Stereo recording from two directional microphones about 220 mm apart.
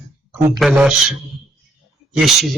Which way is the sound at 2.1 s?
Centre (ahead or behind).